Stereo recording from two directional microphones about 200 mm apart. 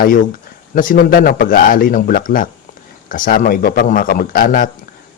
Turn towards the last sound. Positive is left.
turn(degrees=45)  # may be behind; listen again after turning